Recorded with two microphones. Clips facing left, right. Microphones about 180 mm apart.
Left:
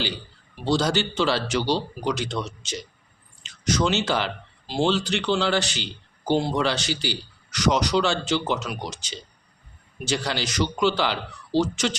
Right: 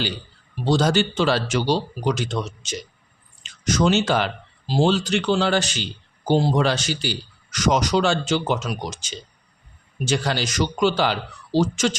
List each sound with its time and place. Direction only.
0.6 s speech: 50° right (ahead or behind)